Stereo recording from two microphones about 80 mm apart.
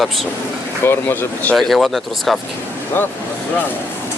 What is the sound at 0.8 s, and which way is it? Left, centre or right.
Speech, left.